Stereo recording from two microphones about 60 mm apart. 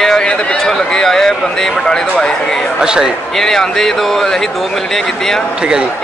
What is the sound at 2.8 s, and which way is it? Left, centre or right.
Speech, centre.